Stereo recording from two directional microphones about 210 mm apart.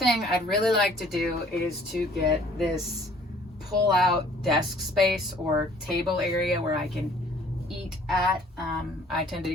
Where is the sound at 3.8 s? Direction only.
Centre (ahead or behind).